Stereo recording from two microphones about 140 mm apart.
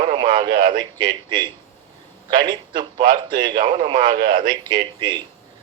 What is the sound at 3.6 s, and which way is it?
Speech, 70° right (ahead or behind).